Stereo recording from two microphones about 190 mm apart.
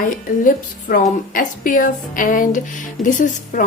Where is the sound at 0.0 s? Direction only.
45° left (ahead or behind).